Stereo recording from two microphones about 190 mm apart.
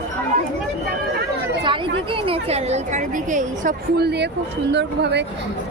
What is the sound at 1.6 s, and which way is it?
A woman's voice, 25° right (ahead or behind).